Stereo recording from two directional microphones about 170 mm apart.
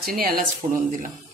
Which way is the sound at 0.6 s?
35° right (ahead or behind).